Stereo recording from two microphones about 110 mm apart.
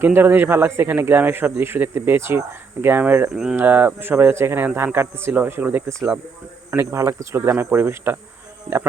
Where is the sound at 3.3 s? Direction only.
5° right (ahead or behind).